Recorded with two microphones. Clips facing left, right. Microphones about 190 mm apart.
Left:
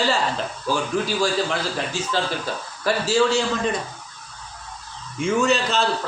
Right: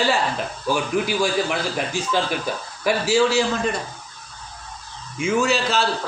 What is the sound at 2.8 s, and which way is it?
Speech, 10° right (ahead or behind).